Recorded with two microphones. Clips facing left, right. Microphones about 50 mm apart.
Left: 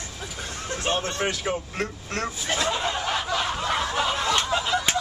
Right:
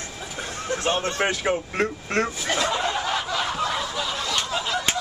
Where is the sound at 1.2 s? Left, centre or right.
Right.